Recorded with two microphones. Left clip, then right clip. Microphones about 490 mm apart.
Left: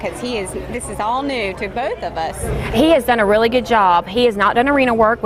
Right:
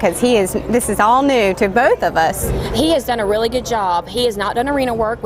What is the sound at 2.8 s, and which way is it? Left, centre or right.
Speech, left.